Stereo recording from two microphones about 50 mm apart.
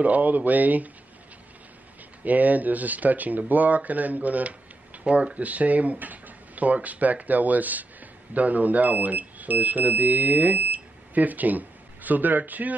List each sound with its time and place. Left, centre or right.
0.0 s speech: right
2.2 s speech: right